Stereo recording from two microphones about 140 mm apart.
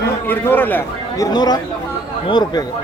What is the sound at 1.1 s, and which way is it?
A man's voice, 25° left (ahead or behind).